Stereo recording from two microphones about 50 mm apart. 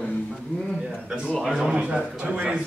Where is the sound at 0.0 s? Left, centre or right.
Left.